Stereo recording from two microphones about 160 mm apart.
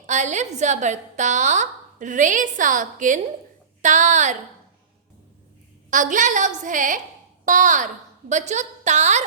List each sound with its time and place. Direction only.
0.0 s a woman's voice: 50° right (ahead or behind)
5.9 s a woman's voice: 50° right (ahead or behind)